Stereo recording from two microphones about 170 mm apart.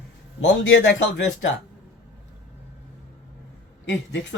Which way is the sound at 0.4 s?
90° left.